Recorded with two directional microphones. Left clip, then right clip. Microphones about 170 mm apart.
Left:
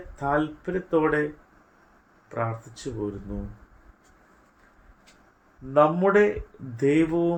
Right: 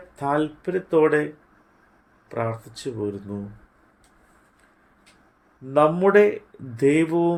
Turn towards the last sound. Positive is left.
turn(degrees=-50)  # may be behind; listen again after turning